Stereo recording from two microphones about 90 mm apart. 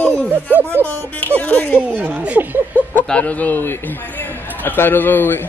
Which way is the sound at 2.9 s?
15° left (ahead or behind).